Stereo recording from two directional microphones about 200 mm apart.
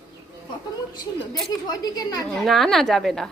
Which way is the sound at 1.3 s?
20° left (ahead or behind).